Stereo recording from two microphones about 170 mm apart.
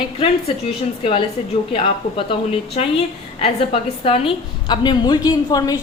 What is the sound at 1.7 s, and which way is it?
A woman's voice, 35° left (ahead or behind).